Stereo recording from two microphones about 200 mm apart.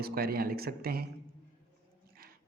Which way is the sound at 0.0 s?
50° right (ahead or behind).